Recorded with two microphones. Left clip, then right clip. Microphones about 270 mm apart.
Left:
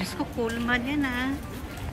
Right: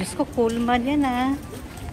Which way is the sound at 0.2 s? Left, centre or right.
Right.